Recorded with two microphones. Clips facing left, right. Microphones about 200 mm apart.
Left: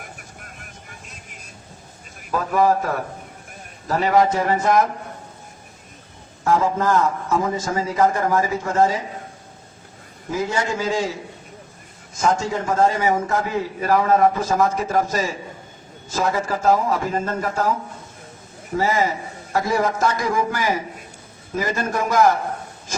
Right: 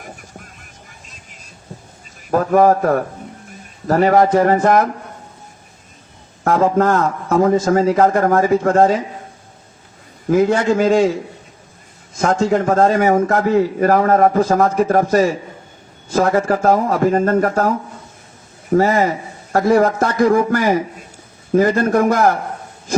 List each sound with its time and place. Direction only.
2.3 s a man's voice: 50° right (ahead or behind)
6.4 s a man's voice: 60° right (ahead or behind)
10.3 s a man's voice: 55° right (ahead or behind)
12.1 s a man's voice: 60° right (ahead or behind)